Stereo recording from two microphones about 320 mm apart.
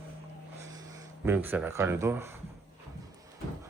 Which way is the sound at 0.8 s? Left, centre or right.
Centre.